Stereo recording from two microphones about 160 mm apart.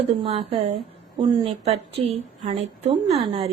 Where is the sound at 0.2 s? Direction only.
40° right (ahead or behind).